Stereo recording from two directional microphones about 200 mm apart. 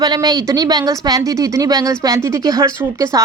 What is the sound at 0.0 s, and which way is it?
Speech, 20° right (ahead or behind).